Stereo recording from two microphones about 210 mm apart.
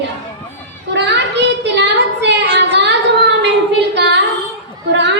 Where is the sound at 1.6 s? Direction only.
55° right (ahead or behind).